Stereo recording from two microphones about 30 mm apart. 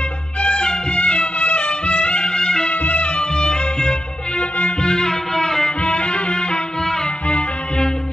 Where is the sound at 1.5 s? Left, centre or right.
Left.